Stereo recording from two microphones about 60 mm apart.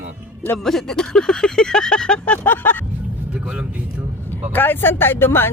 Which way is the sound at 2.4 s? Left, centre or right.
Left.